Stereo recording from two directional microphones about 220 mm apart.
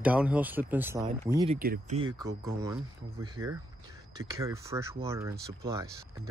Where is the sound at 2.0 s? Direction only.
15° right (ahead or behind).